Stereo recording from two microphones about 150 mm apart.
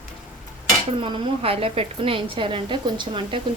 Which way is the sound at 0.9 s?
35° right (ahead or behind).